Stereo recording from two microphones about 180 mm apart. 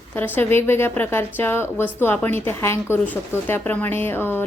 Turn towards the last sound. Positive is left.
turn(degrees=10)  # may be behind; listen again after turning